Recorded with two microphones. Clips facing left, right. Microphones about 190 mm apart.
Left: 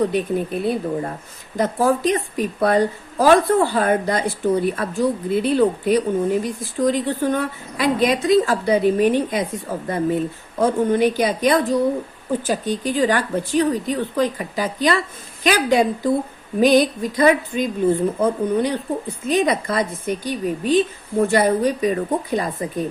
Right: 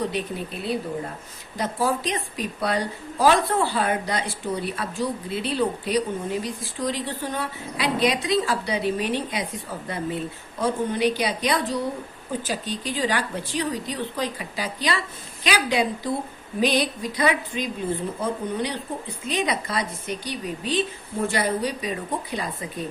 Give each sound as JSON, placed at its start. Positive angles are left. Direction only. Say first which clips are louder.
{"t": 0.1, "sound": "a woman's voice", "louder": "left 8 dB", "side_deg": 50}